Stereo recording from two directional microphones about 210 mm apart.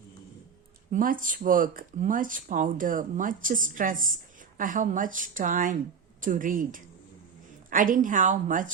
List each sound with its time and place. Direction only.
0.9 s speech: 40° right (ahead or behind)